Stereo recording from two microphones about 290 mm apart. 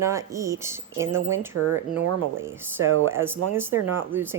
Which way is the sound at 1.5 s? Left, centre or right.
Right.